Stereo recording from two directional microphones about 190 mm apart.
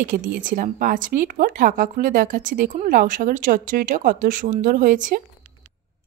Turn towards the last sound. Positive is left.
turn(degrees=-45)  # may be behind; listen again after turning